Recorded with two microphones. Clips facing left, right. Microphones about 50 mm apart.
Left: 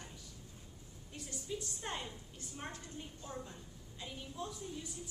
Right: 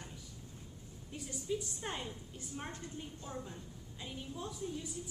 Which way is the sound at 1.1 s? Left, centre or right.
Centre.